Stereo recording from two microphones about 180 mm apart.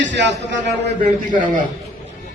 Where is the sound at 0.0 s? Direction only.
85° right.